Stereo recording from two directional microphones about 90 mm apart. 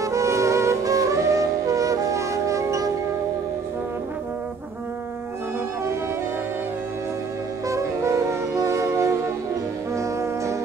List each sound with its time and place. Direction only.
0.0 s music: 35° right (ahead or behind)
7.6 s music: 35° right (ahead or behind)